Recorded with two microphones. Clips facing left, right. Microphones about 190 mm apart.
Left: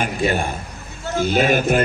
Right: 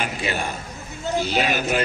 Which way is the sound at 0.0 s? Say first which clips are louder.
Left 6 dB; 50° left (ahead or behind).